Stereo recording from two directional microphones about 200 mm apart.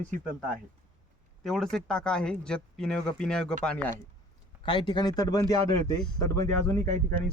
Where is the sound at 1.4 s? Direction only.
Centre (ahead or behind).